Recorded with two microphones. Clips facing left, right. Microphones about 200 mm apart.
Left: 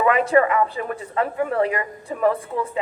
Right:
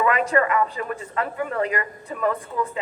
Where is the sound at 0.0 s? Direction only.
30° left (ahead or behind).